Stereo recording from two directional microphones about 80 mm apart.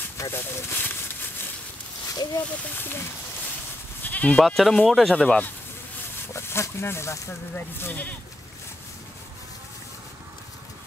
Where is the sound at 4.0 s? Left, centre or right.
Left.